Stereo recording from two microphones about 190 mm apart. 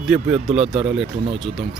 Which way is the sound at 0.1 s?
5° right (ahead or behind).